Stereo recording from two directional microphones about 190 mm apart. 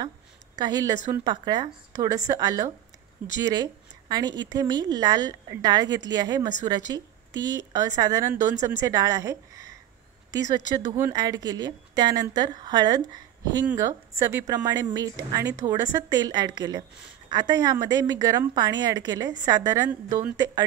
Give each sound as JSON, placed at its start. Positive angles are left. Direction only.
{"t": 0.6, "sound": "speech", "side_deg": -20}
{"t": 11.0, "sound": "speech", "side_deg": -15}